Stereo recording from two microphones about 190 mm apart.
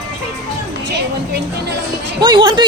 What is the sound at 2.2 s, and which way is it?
Speech, 25° right (ahead or behind).